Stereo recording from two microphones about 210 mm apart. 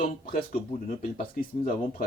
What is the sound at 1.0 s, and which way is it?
Speech, 40° left (ahead or behind).